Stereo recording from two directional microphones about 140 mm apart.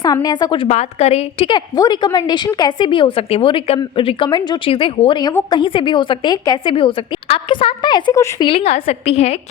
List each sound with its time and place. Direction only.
0.0 s a woman's voice: 30° left (ahead or behind)
0.7 s a woman's voice: 55° left (ahead or behind)
1.5 s a woman's voice: 30° left (ahead or behind)
8.1 s a woman's voice: 20° left (ahead or behind)
8.4 s a woman's voice: 45° left (ahead or behind)